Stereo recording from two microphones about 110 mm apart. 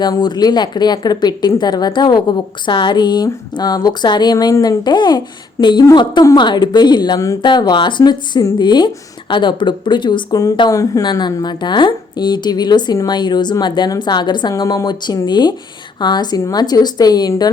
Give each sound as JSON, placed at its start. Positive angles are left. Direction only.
{"t": 0.0, "sound": "speech", "side_deg": 40}
{"t": 4.5, "sound": "speech", "side_deg": 25}
{"t": 4.8, "sound": "speech", "side_deg": 40}